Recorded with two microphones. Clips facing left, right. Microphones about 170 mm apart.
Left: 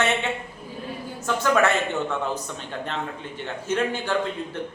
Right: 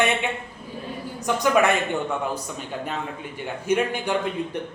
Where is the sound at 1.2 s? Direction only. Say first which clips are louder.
Right 1 dB; 15° right (ahead or behind).